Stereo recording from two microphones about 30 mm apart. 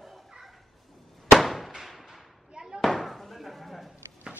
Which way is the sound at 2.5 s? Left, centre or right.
Right.